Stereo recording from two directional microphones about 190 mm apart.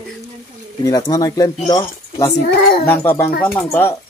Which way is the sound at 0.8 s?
20° left (ahead or behind).